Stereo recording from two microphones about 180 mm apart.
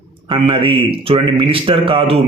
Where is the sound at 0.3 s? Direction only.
30° right (ahead or behind).